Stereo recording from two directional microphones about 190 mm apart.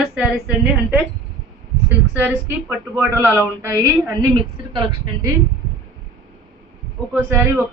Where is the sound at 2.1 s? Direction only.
10° right (ahead or behind).